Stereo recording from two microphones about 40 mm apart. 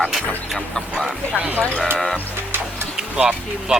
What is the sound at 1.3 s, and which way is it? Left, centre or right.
Speech, right.